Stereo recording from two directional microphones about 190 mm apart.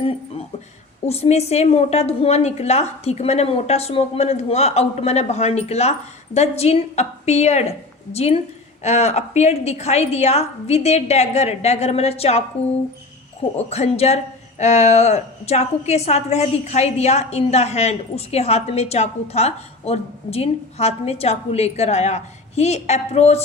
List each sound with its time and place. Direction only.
1.0 s a woman's voice: 35° left (ahead or behind)
13.6 s a woman's voice: 35° left (ahead or behind)